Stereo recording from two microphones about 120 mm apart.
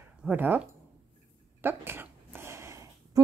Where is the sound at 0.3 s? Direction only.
15° right (ahead or behind).